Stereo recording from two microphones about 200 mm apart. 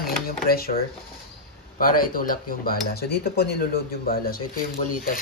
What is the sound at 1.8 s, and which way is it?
Speech, 45° left (ahead or behind).